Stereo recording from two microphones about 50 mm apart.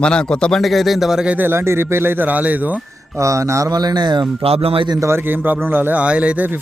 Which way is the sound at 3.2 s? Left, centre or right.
Right.